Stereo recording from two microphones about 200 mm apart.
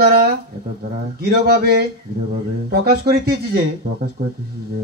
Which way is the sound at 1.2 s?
50° right (ahead or behind).